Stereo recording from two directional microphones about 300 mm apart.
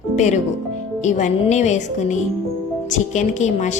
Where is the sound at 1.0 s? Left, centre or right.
Left.